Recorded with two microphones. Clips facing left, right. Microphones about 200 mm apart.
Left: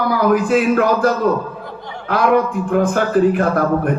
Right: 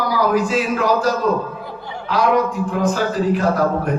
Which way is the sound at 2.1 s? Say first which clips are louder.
Left 2 dB; 55° left (ahead or behind).